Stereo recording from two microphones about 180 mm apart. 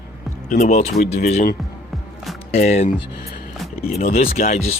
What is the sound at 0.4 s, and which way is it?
Speech, 40° left (ahead or behind).